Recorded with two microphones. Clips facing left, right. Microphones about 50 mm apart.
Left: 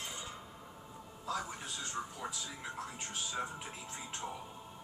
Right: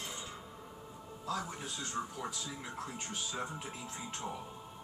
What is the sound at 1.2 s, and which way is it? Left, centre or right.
Speech, centre.